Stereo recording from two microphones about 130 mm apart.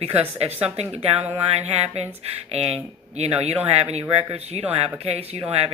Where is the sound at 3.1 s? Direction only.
55° right (ahead or behind).